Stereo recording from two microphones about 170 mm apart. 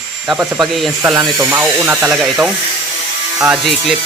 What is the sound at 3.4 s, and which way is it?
Speech, centre (ahead or behind).